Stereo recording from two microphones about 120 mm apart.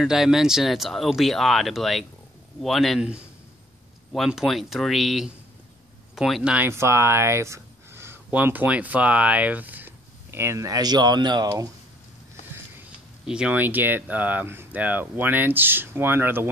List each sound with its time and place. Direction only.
0.0 s speech: 5° right (ahead or behind)
6.5 s speech: 20° right (ahead or behind); by 11.7 s 35° right (ahead or behind)
13.3 s speech: 10° right (ahead or behind)